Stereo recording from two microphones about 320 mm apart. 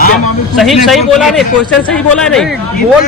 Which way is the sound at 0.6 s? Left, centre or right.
Centre.